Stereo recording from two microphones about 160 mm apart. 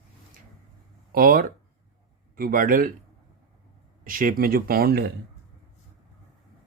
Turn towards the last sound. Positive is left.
turn(degrees=-75)  # may be behind; listen again after turning